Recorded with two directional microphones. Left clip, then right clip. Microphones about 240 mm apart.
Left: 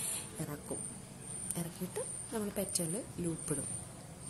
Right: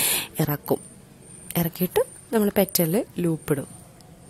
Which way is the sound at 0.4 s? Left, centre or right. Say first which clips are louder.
Right 17 dB; right.